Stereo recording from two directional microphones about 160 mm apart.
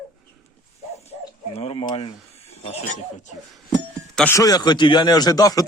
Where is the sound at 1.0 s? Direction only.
40° left (ahead or behind).